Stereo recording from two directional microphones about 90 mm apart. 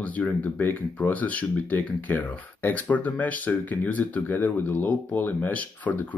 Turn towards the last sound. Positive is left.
turn(degrees=15)  # may be behind; listen again after turning